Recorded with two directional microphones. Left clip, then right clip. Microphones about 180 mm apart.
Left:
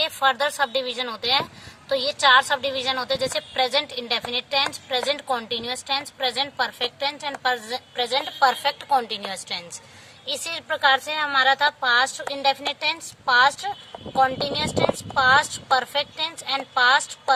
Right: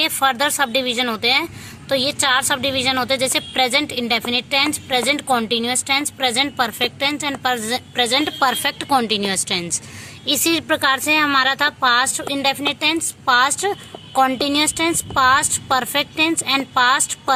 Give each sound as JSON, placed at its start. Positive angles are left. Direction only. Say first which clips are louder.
{"t": 0.0, "sound": "a woman's voice", "louder": "right 3 dB", "side_deg": -25}